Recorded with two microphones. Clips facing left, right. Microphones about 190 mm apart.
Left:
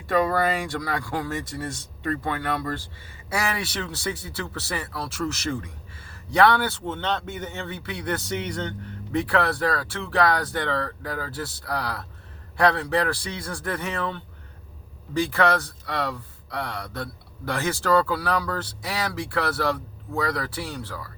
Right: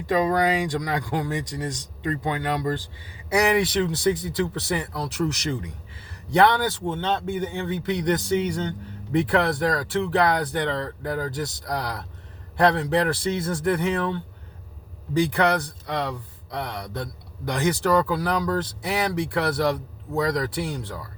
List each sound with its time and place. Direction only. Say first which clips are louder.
0.0 s speech: right 1 dB; 15° right (ahead or behind)